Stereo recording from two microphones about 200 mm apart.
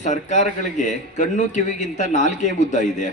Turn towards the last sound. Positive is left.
turn(degrees=35)  # may be behind; listen again after turning